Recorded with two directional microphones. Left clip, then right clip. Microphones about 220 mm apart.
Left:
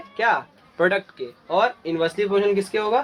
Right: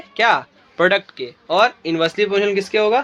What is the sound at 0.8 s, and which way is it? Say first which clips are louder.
Speech: right 5 dB; 50° right (ahead or behind).